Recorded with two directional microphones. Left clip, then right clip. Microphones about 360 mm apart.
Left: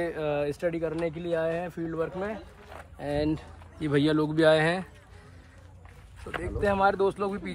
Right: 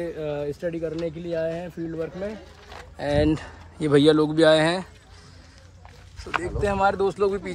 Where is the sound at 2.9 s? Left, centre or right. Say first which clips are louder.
Right 7 dB; right.